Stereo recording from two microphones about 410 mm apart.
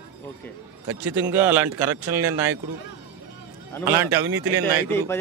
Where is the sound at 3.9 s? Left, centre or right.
Centre.